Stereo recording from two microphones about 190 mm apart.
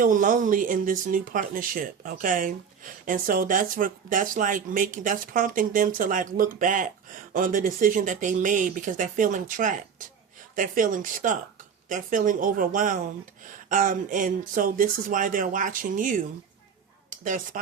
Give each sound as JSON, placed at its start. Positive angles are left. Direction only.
{"t": 0.0, "sound": "speech", "side_deg": -45}